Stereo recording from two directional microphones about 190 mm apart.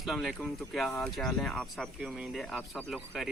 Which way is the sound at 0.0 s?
Centre (ahead or behind).